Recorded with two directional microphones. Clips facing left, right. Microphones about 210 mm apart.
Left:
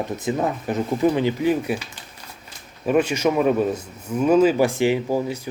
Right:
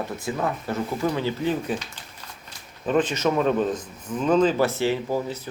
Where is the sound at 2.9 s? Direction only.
10° left (ahead or behind).